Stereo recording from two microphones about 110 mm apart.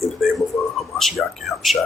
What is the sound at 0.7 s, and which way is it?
A man's voice, centre (ahead or behind).